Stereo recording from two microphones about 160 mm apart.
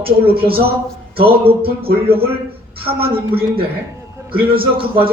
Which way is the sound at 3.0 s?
70° right (ahead or behind).